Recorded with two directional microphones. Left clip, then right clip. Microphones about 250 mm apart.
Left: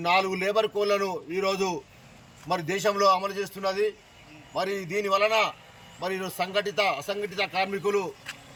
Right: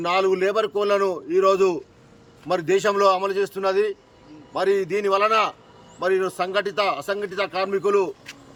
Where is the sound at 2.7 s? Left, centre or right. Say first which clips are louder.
Right 4 dB; right.